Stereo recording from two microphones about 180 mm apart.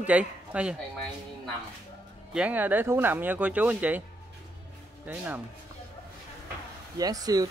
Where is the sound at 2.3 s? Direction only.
5° right (ahead or behind).